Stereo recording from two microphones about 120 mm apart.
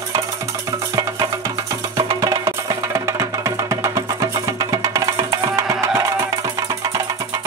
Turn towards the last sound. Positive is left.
turn(degrees=-30)  # may be behind; listen again after turning